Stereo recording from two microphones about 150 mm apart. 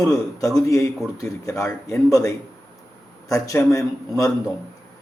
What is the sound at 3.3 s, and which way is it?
Speech, 20° left (ahead or behind).